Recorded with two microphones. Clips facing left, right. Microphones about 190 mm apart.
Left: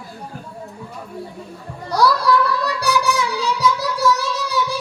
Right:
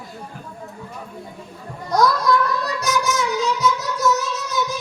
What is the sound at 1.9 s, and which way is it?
Music, 30° left (ahead or behind).